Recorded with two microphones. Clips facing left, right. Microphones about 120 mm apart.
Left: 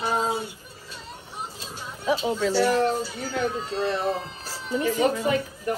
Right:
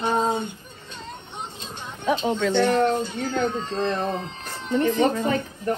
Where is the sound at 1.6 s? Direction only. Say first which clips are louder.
Right 1 dB; 5° left (ahead or behind).